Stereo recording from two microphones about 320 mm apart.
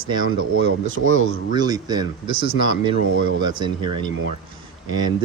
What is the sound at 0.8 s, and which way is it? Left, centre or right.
Speech, right.